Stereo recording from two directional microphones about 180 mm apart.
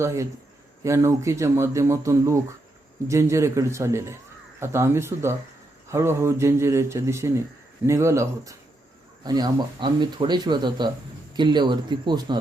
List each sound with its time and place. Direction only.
0.0 s speech: 15° right (ahead or behind)